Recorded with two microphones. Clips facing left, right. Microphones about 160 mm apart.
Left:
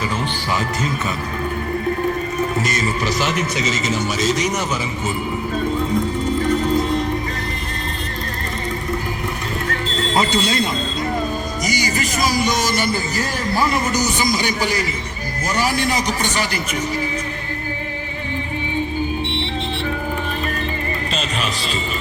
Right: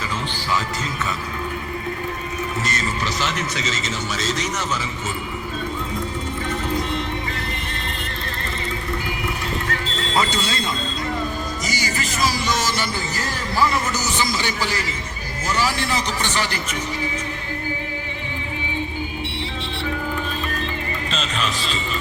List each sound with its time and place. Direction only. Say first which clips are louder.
2.6 s a man's voice: left 4 dB; 10° left (ahead or behind)
10.2 s a man's voice: left 3 dB; 15° left (ahead or behind)
11.6 s music: left 6 dB; 15° left (ahead or behind)
12.2 s a man's voice: left 2 dB; 15° left (ahead or behind)
21.1 s music: right 1 dB; 10° left (ahead or behind)